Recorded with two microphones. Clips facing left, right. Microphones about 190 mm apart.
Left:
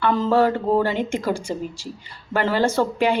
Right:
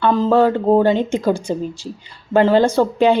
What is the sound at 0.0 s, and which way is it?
A woman's voice, 20° right (ahead or behind).